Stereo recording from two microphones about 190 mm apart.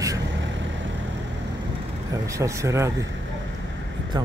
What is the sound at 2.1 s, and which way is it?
Speech, 15° right (ahead or behind).